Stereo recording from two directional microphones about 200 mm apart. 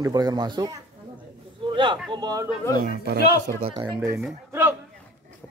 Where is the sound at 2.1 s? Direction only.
20° right (ahead or behind).